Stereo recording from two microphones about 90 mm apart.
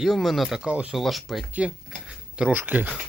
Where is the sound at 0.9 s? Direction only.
Centre (ahead or behind); by 2.9 s 20° right (ahead or behind).